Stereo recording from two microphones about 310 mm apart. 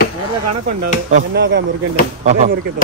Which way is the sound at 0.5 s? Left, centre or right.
Right.